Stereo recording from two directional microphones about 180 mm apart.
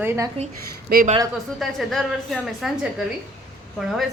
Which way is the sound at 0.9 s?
55° right (ahead or behind).